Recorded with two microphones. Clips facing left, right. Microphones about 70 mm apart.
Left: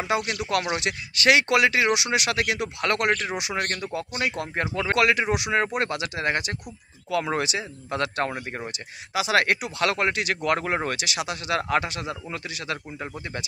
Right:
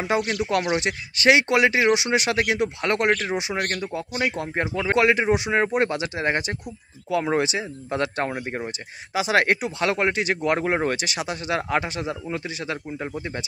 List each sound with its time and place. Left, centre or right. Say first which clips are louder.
0.4 s speech: right 3 dB; right
3.1 s speech: right 3 dB; centre
4.2 s speech: right 3 dB; right
9.1 s speech: right 2 dB; right